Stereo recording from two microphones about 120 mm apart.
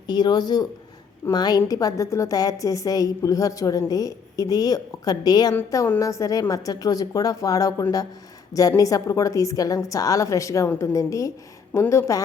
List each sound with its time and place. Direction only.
0.1 s a woman's voice: 35° left (ahead or behind)